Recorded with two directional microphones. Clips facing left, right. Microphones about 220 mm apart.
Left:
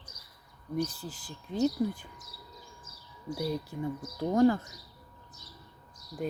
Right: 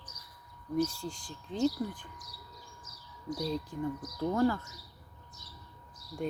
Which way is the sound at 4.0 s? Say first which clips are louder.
Even; 25° left (ahead or behind).